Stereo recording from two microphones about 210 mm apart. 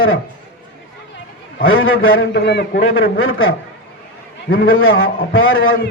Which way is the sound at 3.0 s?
70° left (ahead or behind).